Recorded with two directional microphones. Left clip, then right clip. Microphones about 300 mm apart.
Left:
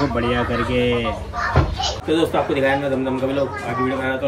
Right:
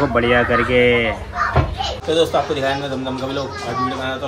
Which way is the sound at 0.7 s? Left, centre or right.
Centre.